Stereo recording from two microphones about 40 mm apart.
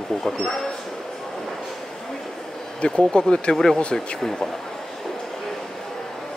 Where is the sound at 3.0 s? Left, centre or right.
Centre.